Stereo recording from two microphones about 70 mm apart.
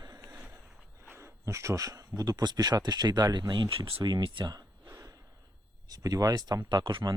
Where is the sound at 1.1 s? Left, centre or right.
Right.